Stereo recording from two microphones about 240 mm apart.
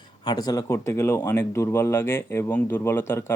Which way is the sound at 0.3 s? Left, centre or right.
Centre.